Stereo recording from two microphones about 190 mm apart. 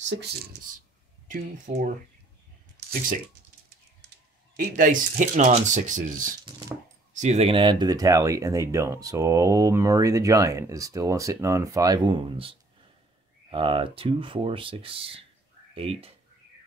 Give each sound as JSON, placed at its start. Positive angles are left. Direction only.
{"t": 1.3, "sound": "speech", "side_deg": -45}
{"t": 4.7, "sound": "speech", "side_deg": -45}